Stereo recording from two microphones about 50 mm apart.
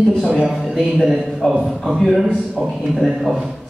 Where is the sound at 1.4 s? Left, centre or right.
Centre.